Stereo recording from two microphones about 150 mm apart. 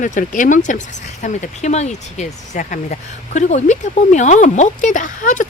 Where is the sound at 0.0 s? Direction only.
60° left (ahead or behind).